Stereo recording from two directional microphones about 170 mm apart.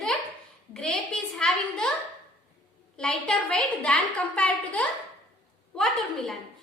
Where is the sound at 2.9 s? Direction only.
5° left (ahead or behind).